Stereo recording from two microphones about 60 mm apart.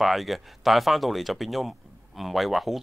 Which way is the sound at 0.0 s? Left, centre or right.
Centre.